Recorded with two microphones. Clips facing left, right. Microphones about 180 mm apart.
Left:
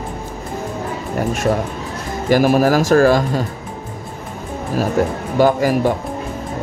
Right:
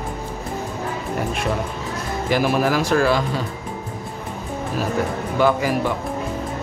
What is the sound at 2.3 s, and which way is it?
Speech, 45° left (ahead or behind).